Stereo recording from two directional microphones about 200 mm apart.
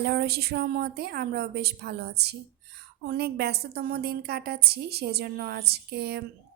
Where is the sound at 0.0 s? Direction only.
55° right (ahead or behind).